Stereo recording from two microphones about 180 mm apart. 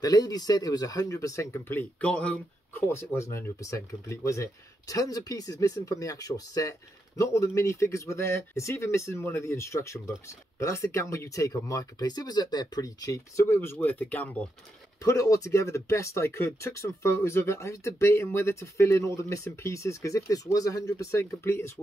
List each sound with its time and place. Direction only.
0.0 s speech: 20° left (ahead or behind)